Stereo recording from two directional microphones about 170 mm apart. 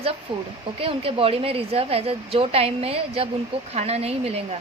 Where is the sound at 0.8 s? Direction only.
35° right (ahead or behind).